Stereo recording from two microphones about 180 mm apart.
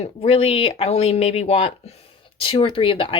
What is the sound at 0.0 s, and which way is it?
Speech, 30° left (ahead or behind).